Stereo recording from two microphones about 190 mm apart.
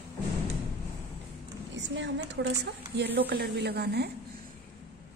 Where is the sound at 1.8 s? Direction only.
65° right (ahead or behind).